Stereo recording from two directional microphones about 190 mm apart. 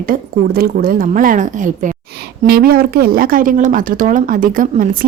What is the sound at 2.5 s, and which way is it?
A woman's voice, 55° right (ahead or behind).